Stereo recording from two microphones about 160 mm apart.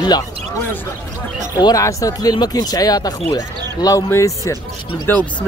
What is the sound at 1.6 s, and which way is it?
Speech, 25° left (ahead or behind).